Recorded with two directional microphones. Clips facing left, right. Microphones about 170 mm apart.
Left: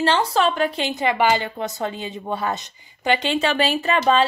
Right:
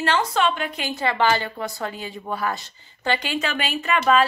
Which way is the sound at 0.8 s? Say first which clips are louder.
Right 1 dB; 20° left (ahead or behind).